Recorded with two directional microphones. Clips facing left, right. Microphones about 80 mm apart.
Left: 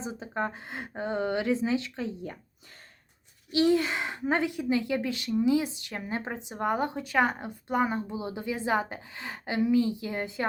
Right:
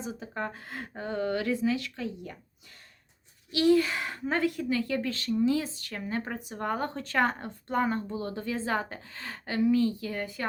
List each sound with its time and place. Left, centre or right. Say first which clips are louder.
0.0 s speech: left 3 dB; left
3.5 s a woman's voice: right 1 dB; left